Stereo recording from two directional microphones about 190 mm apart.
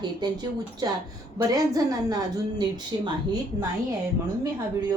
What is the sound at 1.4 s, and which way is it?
Speech, 20° right (ahead or behind).